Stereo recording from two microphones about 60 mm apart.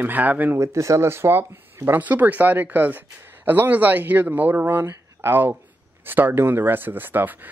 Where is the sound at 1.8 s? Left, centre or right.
Right.